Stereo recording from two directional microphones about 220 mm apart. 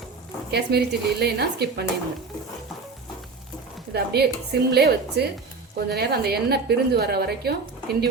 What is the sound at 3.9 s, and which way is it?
A woman's voice, 45° right (ahead or behind).